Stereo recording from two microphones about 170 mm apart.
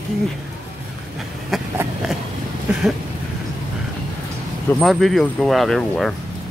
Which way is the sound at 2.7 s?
10° right (ahead or behind).